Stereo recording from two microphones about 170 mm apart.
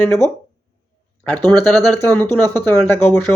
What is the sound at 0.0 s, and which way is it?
Speech, 15° left (ahead or behind).